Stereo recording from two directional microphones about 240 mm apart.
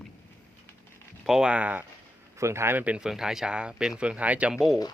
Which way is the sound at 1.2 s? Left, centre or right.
Centre.